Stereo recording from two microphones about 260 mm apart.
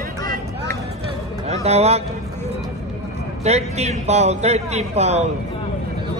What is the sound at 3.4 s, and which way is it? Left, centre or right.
A man's voice, right.